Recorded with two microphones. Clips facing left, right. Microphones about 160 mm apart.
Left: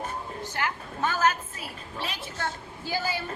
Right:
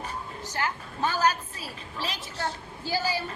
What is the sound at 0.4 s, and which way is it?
A woman's voice, 35° right (ahead or behind).